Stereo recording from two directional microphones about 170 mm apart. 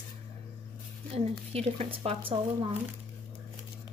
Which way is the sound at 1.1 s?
35° right (ahead or behind).